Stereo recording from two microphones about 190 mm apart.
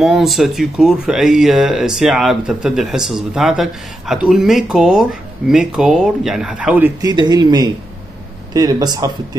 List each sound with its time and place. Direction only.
0.0 s speech: centre (ahead or behind)
7.0 s speech: 20° right (ahead or behind)